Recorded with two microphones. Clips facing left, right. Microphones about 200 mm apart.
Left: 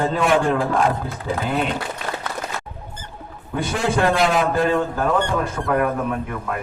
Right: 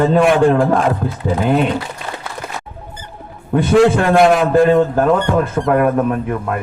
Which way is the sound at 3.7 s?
70° right (ahead or behind).